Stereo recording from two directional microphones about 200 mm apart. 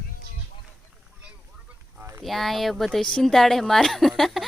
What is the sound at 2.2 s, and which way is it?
Speech, centre (ahead or behind).